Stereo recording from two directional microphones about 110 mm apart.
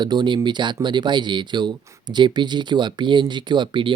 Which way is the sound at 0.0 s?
45° right (ahead or behind).